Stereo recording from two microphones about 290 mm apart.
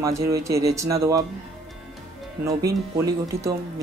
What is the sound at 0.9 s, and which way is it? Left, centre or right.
Speech, centre.